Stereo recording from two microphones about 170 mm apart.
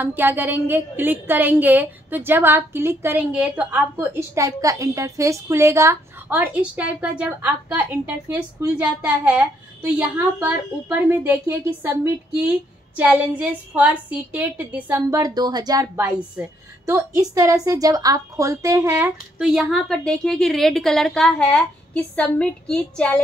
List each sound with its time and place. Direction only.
0.0 s a woman's voice: 10° right (ahead or behind); by 23.2 s 5° left (ahead or behind)